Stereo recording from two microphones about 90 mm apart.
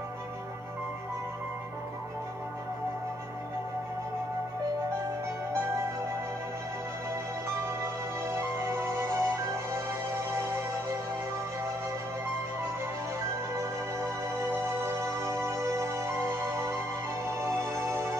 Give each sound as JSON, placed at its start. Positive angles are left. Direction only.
{"t": 7.6, "sound": "music", "side_deg": -30}
{"t": 14.5, "sound": "music", "side_deg": -30}